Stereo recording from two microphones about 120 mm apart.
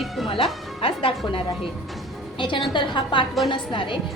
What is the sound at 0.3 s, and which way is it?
Speech, 50° left (ahead or behind).